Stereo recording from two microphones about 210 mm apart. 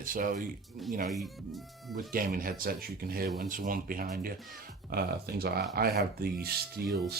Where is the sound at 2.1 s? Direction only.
40° right (ahead or behind).